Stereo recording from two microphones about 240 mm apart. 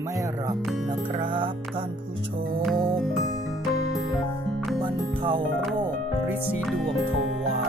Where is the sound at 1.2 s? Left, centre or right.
Right.